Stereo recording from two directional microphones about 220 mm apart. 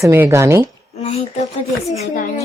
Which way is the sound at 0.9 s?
30° left (ahead or behind).